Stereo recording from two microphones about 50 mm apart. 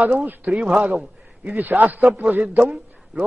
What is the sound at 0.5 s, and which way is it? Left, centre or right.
A man's voice, right.